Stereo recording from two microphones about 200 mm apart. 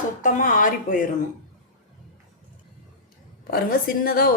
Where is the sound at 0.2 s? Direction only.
40° left (ahead or behind).